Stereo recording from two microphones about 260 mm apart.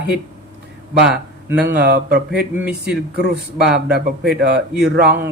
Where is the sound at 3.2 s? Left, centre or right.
Right.